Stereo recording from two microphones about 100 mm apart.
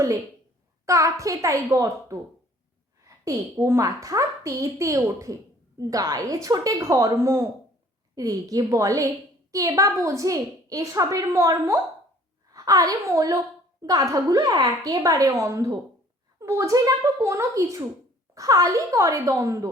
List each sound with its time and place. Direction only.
0.9 s a woman's voice: 30° right (ahead or behind)